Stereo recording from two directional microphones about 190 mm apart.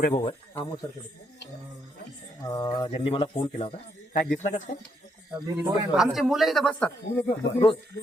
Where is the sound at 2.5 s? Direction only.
20° left (ahead or behind).